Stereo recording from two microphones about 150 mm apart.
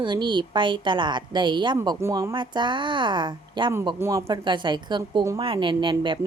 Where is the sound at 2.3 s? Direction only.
30° right (ahead or behind).